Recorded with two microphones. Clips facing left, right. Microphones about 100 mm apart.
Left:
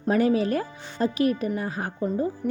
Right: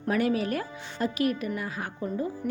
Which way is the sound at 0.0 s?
30° left (ahead or behind).